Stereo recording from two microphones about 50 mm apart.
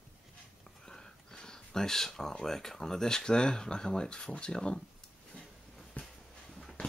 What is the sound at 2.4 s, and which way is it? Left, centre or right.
Speech, centre.